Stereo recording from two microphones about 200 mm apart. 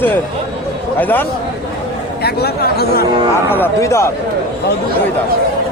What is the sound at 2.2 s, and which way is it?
Speech, 50° left (ahead or behind).